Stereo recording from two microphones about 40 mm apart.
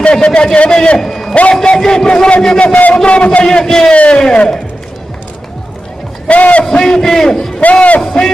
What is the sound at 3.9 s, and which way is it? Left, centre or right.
Speech, left.